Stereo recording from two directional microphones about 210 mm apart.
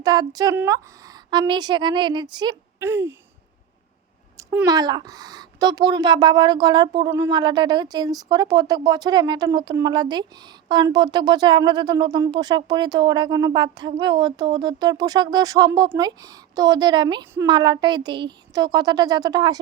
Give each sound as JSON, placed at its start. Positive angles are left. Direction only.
{"t": 0.0, "sound": "speech", "side_deg": -20}
{"t": 4.4, "sound": "speech", "side_deg": -15}